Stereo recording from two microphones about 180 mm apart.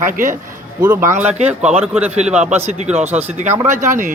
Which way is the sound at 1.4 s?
35° right (ahead or behind).